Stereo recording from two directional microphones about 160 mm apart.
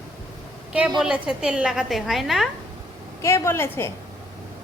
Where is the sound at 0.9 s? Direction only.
5° right (ahead or behind).